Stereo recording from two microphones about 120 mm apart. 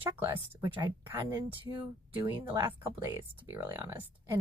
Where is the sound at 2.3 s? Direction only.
30° right (ahead or behind).